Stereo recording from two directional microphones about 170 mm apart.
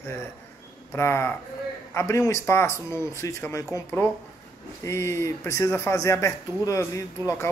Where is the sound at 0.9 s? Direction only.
15° left (ahead or behind).